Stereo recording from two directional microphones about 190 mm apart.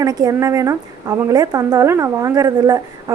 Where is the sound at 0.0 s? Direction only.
20° right (ahead or behind).